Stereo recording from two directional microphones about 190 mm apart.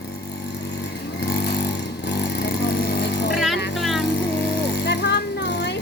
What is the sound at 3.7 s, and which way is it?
Vehicle, centre (ahead or behind).